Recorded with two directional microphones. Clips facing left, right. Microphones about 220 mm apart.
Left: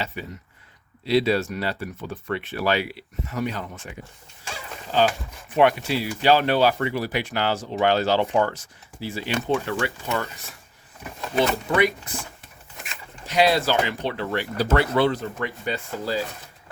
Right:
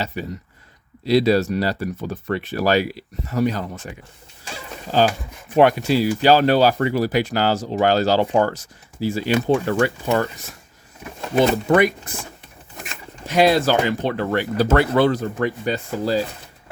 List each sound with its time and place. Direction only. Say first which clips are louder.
0.0 s speech: right 5 dB; 40° right (ahead or behind)
5.5 s speech: right 4 dB; 40° right (ahead or behind)
11.7 s speech: right 6 dB; 50° right (ahead or behind)
13.2 s speech: right 4 dB; 50° right (ahead or behind)